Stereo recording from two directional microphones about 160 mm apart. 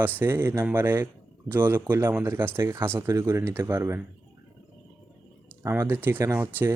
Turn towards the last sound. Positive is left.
turn(degrees=-10)  # may be behind; listen again after turning